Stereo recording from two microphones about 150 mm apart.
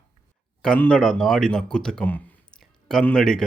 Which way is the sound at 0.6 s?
5° left (ahead or behind).